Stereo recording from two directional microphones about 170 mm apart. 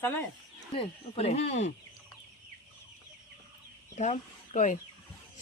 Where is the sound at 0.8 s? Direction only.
35° left (ahead or behind).